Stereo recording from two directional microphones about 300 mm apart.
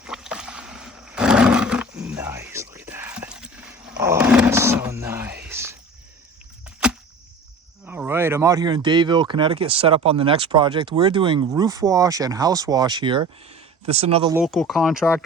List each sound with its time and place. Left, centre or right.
0.0 s roaring cats: centre
3.9 s roar: centre
5.5 s a sound: centre
7.9 s speech: centre
14.3 s speech: centre